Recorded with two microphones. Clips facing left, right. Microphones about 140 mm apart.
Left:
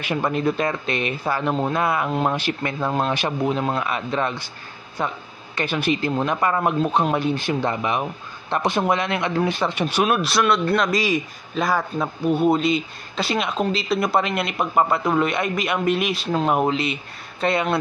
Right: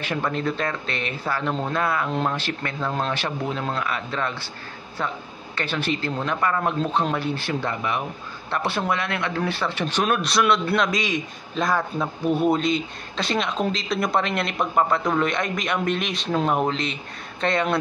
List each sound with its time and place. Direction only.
0.0 s speech: 15° left (ahead or behind)
5.6 s speech: 15° left (ahead or behind)